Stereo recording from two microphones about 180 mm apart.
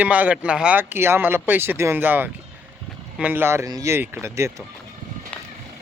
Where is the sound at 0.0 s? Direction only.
10° right (ahead or behind).